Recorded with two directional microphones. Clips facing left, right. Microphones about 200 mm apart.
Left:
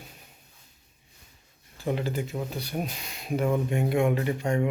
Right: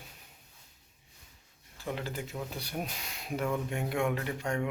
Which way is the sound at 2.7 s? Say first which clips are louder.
Left 4 dB; 10° left (ahead or behind).